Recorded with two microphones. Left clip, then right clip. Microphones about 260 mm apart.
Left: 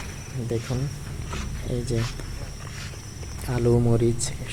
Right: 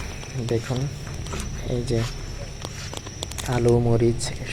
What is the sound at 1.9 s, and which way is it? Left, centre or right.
Speech, centre.